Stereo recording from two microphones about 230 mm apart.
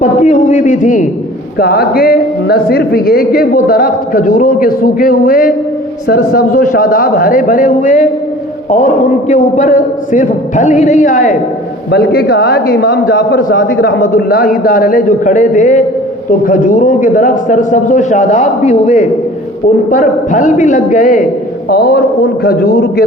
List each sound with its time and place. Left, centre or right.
0.0 s speech: left
9.3 s a man's voice: left
14.0 s speech: left